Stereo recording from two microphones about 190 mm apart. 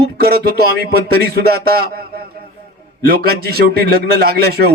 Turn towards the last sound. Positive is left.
turn(degrees=-55)  # may be behind; listen again after turning